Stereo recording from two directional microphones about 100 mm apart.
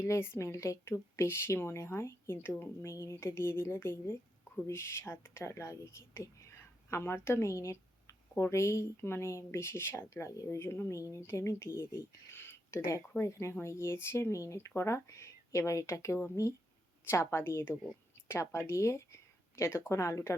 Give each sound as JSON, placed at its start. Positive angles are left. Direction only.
{"t": 0.0, "sound": "speech", "side_deg": 25}